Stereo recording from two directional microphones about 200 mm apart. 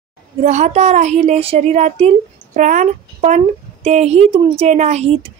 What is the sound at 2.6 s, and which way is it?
Speech, 40° right (ahead or behind).